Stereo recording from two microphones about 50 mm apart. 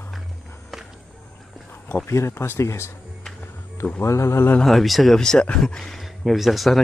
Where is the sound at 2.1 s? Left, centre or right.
Left.